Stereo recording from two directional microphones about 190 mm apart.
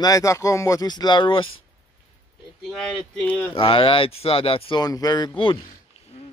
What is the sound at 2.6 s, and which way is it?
Speech, centre (ahead or behind).